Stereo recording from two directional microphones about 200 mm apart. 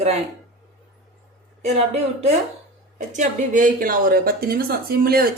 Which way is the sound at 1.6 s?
30° right (ahead or behind).